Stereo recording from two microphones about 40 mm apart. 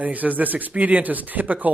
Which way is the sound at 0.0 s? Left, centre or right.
Right.